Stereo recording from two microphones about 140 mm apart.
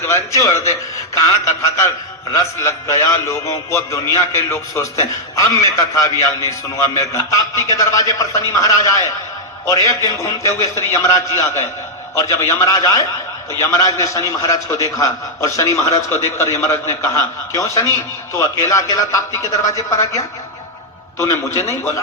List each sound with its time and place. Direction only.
0.0 s a man's voice: 20° left (ahead or behind)